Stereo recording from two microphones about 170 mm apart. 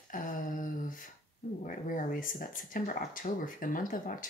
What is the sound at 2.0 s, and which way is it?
Speech, 50° left (ahead or behind).